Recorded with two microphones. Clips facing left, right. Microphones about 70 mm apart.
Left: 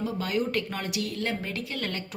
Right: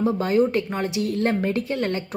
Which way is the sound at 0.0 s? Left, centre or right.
Right.